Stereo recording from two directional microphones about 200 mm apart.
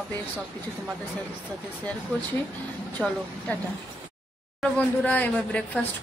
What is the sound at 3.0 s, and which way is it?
Speech, centre (ahead or behind).